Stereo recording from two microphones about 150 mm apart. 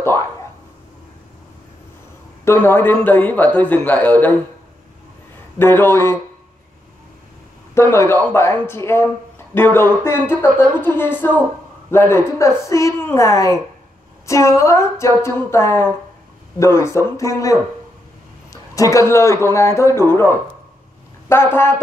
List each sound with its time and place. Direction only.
2.4 s speech: 15° left (ahead or behind)
5.6 s speech: 15° left (ahead or behind)
7.7 s a man's voice: 20° left (ahead or behind)